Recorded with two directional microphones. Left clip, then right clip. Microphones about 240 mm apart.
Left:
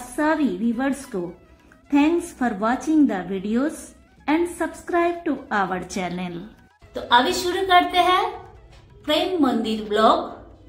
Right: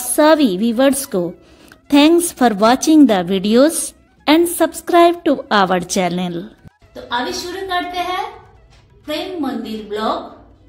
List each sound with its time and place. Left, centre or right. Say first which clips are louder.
0.1 s a woman's voice: right 10 dB; right
7.6 s a woman's voice: left 4 dB; centre